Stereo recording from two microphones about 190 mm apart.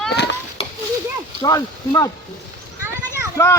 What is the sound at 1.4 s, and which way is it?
Speech, 20° left (ahead or behind).